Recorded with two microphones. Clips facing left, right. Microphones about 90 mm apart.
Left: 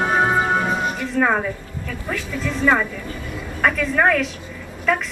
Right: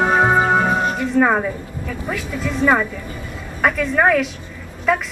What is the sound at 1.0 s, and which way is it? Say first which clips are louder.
A woman's voice: right 3 dB; 10° right (ahead or behind).